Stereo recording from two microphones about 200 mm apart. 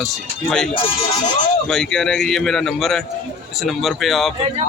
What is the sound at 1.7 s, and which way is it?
Speech, centre (ahead or behind).